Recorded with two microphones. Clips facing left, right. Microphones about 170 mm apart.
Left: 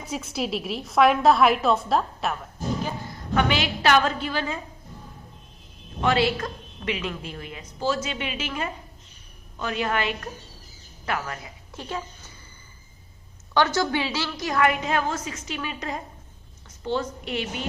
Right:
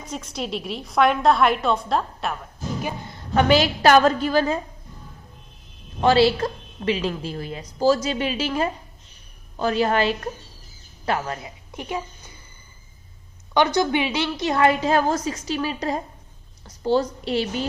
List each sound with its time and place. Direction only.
0.0 s a woman's voice: 5° left (ahead or behind)
3.3 s a woman's voice: 40° right (ahead or behind)
6.0 s a woman's voice: 30° right (ahead or behind)
11.7 s a sound: 15° right (ahead or behind)
13.5 s a woman's voice: 15° right (ahead or behind); by 17.7 s 35° right (ahead or behind)